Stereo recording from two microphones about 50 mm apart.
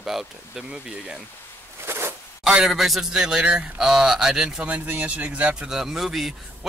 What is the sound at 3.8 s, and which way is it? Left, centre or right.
Speech, centre.